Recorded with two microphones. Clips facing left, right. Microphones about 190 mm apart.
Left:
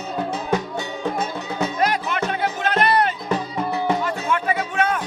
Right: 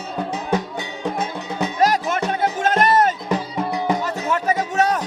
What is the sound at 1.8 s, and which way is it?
Music, 45° right (ahead or behind).